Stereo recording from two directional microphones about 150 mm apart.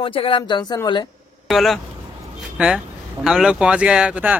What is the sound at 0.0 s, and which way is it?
Speech, 35° left (ahead or behind).